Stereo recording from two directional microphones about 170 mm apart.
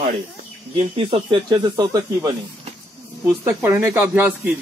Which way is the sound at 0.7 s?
30° right (ahead or behind).